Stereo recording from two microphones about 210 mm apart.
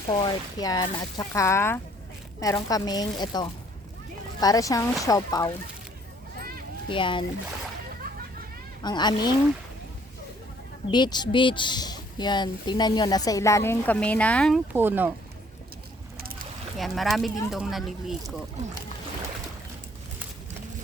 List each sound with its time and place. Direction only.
0.1 s speech: 20° left (ahead or behind)
6.8 s speech: 25° left (ahead or behind)
8.8 s speech: 20° left (ahead or behind)
10.9 s speech: 20° left (ahead or behind); by 14.6 s 5° left (ahead or behind)
14.7 s speech: 10° right (ahead or behind)
16.1 s boat: 45° right (ahead or behind)
16.7 s speech: centre (ahead or behind)